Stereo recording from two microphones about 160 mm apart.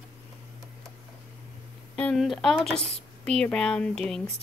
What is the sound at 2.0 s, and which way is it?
Speech, 5° left (ahead or behind).